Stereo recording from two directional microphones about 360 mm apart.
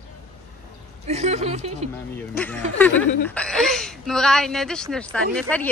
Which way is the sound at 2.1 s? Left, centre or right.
Centre.